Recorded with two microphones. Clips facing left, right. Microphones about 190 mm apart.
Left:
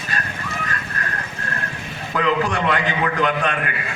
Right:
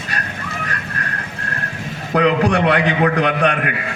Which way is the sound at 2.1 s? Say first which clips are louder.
Right 5 dB; 70° right (ahead or behind).